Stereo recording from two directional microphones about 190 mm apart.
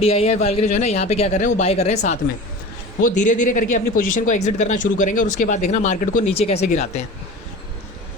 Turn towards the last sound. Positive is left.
turn(degrees=35)  # may be behind; listen again after turning